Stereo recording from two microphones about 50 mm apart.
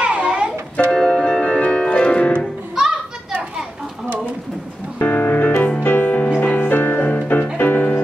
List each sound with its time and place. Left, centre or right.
0.0 s music: right
0.9 s music: centre
2.7 s children playing: centre
4.9 s music: left